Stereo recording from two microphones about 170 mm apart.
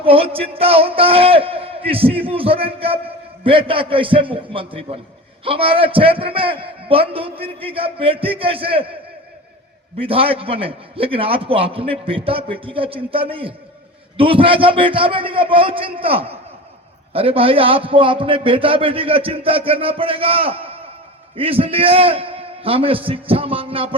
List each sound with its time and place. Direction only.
0.0 s a man's voice: 35° right (ahead or behind)
10.0 s a man's voice: 35° right (ahead or behind)